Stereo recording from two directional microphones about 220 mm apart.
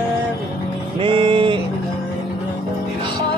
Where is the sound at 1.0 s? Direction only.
25° right (ahead or behind).